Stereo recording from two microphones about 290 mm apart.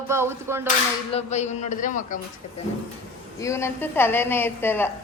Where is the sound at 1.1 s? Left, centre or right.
Left.